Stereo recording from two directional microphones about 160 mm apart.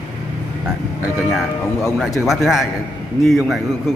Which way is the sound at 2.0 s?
Centre (ahead or behind).